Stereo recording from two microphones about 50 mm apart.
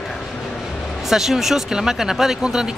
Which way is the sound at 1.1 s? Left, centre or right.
Centre.